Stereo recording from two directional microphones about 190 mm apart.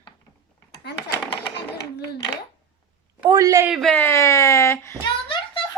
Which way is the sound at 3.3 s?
20° right (ahead or behind).